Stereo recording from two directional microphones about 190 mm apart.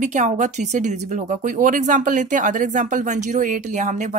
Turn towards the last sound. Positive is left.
turn(degrees=-40)  # may be behind; listen again after turning